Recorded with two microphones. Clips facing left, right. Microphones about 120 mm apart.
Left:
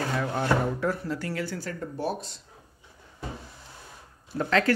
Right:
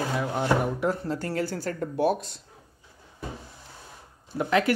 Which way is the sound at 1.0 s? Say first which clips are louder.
Right 3 dB; 35° right (ahead or behind).